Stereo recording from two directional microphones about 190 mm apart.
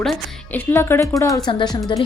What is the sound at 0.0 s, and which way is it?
A woman's voice, 5° left (ahead or behind).